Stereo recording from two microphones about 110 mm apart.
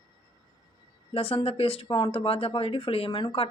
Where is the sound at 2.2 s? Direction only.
60° left (ahead or behind).